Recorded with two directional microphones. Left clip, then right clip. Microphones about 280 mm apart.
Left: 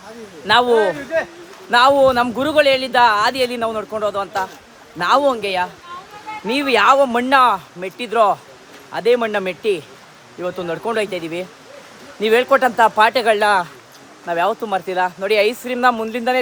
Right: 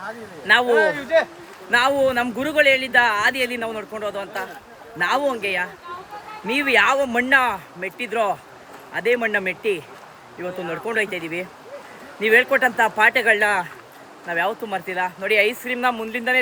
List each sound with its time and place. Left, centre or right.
0.4 s speech: centre
1.7 s speech: centre